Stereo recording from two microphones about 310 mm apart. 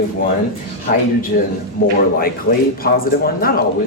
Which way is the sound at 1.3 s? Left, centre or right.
Left.